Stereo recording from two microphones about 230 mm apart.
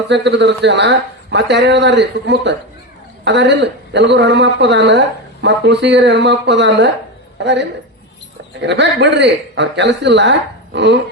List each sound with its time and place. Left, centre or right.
0.1 s speech: right